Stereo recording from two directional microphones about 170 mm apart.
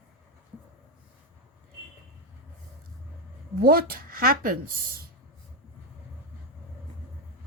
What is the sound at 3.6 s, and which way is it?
A woman's voice, 60° right (ahead or behind).